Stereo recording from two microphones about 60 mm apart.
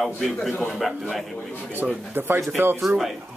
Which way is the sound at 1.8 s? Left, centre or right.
Right.